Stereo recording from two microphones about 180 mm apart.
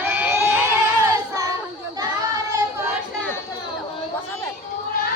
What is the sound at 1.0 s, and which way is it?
Music, 20° right (ahead or behind).